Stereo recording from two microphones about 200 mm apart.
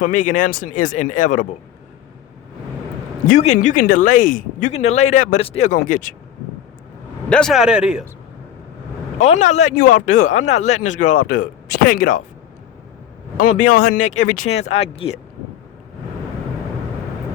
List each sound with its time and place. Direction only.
0.0 s speech: 40° left (ahead or behind)
3.2 s speech: 35° left (ahead or behind)
7.3 s a man's voice: 5° left (ahead or behind)
9.2 s speech: 35° left (ahead or behind)
13.3 s speech: 40° left (ahead or behind)